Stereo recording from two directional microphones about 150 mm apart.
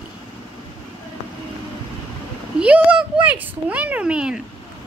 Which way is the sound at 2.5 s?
10° right (ahead or behind).